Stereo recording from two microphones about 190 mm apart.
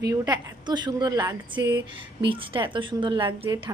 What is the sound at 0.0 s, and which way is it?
A woman's voice, 20° right (ahead or behind).